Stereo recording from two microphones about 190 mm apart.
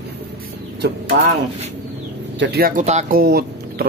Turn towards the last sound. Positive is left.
turn(degrees=-55)  # may be behind; listen again after turning